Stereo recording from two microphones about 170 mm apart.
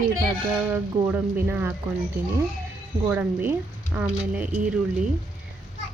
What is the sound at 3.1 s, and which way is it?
Speech, 10° right (ahead or behind).